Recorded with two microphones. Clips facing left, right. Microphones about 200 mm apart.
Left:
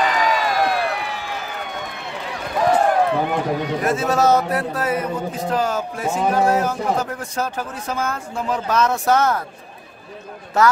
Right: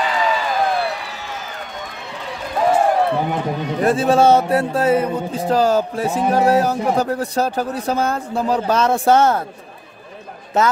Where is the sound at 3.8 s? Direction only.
30° right (ahead or behind).